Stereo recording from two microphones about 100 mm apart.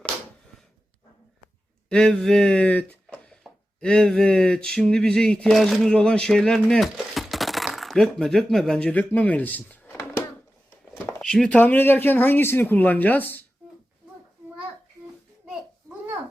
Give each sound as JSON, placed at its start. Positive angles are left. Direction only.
{"t": 1.9, "sound": "speech", "side_deg": 10}
{"t": 3.2, "sound": "a sound", "side_deg": 5}
{"t": 11.2, "sound": "speech", "side_deg": 5}